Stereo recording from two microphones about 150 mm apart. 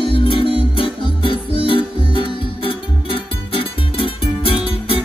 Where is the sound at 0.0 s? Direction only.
35° left (ahead or behind).